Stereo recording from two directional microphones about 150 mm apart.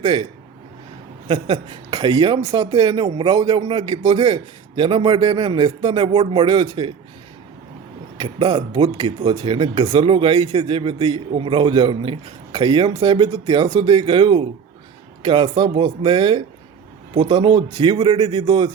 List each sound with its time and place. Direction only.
0.0 s speech: 30° right (ahead or behind)
1.3 s speech: 35° right (ahead or behind)
8.2 s speech: 30° right (ahead or behind)